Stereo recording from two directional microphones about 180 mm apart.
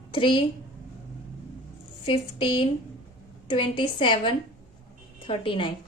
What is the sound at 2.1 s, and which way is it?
A woman's voice, 30° left (ahead or behind).